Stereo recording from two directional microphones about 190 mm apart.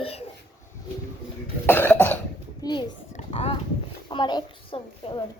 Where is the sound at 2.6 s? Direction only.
20° left (ahead or behind).